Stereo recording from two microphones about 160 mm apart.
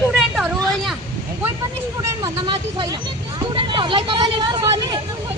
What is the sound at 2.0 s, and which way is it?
Vehicle, 25° right (ahead or behind).